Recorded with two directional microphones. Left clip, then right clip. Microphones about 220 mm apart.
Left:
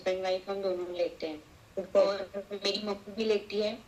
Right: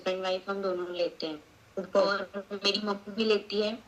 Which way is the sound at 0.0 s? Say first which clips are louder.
Even; 15° right (ahead or behind).